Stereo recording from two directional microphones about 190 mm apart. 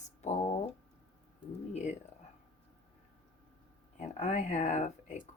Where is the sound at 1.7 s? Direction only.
35° left (ahead or behind).